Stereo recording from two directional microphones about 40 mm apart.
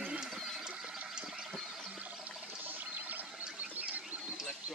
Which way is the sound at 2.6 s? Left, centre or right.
Right.